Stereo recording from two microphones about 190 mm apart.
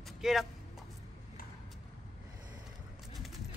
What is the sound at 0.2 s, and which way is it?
Speech, centre (ahead or behind).